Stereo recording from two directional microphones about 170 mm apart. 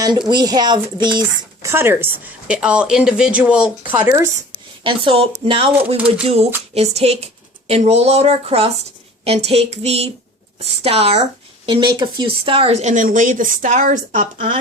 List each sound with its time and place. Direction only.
0.3 s speech: 25° right (ahead or behind)
1.6 s speech: 15° right (ahead or behind)
4.8 s speech: 30° right (ahead or behind); by 14.4 s 50° right (ahead or behind)